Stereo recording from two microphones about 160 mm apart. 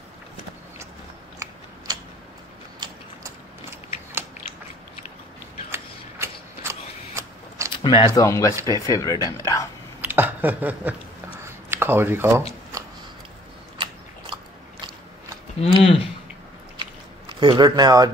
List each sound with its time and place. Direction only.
5.7 s mechanisms: 15° right (ahead or behind)
7.7 s a sound: 30° left (ahead or behind)
8.1 s speech: 20° left (ahead or behind)
10.0 s a sound: 10° right (ahead or behind)
11.7 s speech: 15° right (ahead or behind)
13.7 s biting: 30° right (ahead or behind)
15.6 s speech: 35° left (ahead or behind)
17.4 s speech: 25° right (ahead or behind)